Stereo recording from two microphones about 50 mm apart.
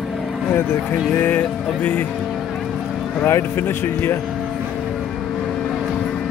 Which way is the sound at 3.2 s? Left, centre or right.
Left.